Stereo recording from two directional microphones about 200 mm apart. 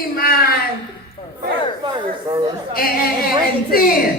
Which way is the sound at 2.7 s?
50° left (ahead or behind).